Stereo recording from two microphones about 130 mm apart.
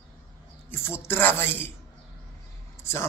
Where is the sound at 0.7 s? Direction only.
20° left (ahead or behind).